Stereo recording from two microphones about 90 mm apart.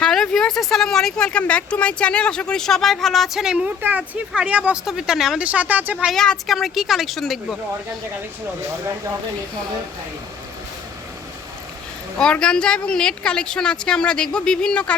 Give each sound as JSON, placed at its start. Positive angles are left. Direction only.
{"t": 0.0, "sound": "speech", "side_deg": 5}
{"t": 5.5, "sound": "speech", "side_deg": -15}
{"t": 6.1, "sound": "speech", "side_deg": 5}
{"t": 12.2, "sound": "speech", "side_deg": 10}